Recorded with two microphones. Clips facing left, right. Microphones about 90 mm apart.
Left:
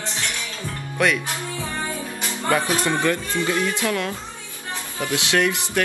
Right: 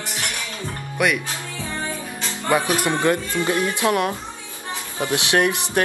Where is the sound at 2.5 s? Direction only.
20° right (ahead or behind).